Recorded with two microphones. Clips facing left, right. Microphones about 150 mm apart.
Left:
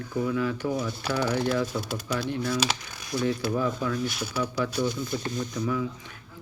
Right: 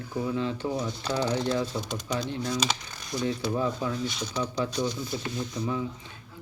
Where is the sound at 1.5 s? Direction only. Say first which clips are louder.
Left 1 dB; 25° right (ahead or behind).